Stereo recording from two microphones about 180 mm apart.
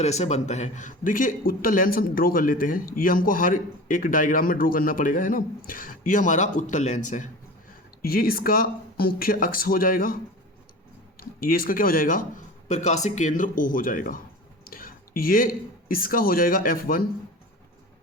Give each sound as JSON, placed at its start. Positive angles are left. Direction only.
{"t": 0.0, "sound": "a man's voice", "side_deg": 40}
{"t": 8.0, "sound": "speech", "side_deg": 55}
{"t": 11.2, "sound": "a man's voice", "side_deg": 55}
{"t": 12.6, "sound": "a man's voice", "side_deg": 40}